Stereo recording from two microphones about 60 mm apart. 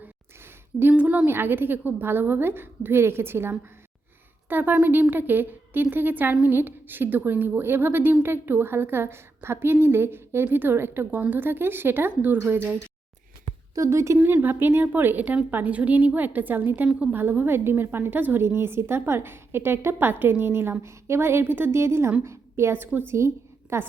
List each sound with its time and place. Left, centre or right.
0.9 s a woman's voice: right
13.7 s a woman's voice: right
14.4 s a woman's voice: right
17.2 s a woman's voice: right